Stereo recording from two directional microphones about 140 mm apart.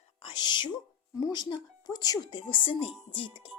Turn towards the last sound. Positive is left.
turn(degrees=40)  # may be behind; listen again after turning